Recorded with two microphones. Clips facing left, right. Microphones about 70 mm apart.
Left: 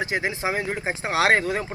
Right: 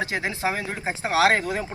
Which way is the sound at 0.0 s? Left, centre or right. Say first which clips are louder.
Even; centre.